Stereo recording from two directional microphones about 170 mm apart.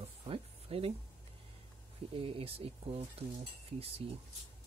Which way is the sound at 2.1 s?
35° right (ahead or behind).